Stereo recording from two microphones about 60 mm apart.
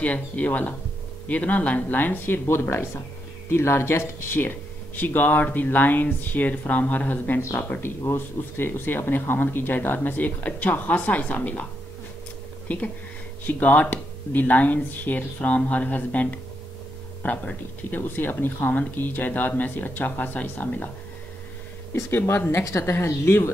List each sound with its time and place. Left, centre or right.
0.0 s speech: left
8.0 s speech: left
13.5 s speech: left
22.5 s speech: left